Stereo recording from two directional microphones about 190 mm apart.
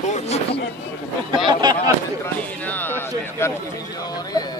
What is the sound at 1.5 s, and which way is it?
Speech, 20° right (ahead or behind).